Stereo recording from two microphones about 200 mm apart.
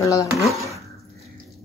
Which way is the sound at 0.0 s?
15° left (ahead or behind).